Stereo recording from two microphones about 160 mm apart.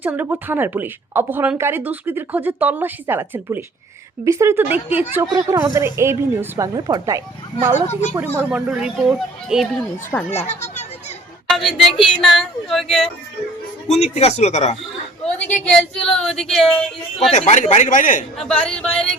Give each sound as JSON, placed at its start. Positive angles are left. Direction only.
{"t": 0.0, "sound": "a woman's voice", "side_deg": -10}
{"t": 8.1, "sound": "speech", "side_deg": -10}
{"t": 10.1, "sound": "speech", "side_deg": 10}
{"t": 13.8, "sound": "speech", "side_deg": 45}
{"t": 15.2, "sound": "speech", "side_deg": 5}
{"t": 17.3, "sound": "speech", "side_deg": 50}
{"t": 18.3, "sound": "speech", "side_deg": 5}